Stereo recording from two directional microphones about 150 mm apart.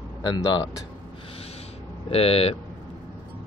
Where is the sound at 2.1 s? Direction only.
40° left (ahead or behind).